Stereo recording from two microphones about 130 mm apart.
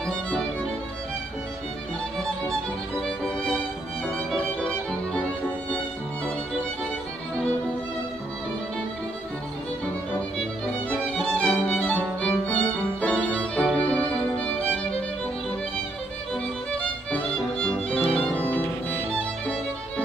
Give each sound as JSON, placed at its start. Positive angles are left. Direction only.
{"t": 3.0, "sound": "music", "side_deg": 5}
{"t": 10.9, "sound": "music", "side_deg": 10}
{"t": 11.6, "sound": "violin", "side_deg": 10}
{"t": 16.7, "sound": "music", "side_deg": 10}
{"t": 18.1, "sound": "violin", "side_deg": 10}